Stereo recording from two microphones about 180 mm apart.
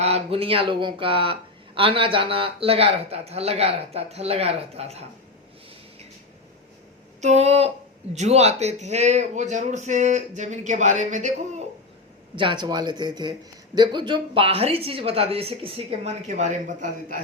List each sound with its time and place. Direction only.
0.0 s speech: 35° right (ahead or behind)
7.2 s speech: 40° right (ahead or behind)
12.4 s speech: 25° right (ahead or behind); by 17.2 s 45° right (ahead or behind)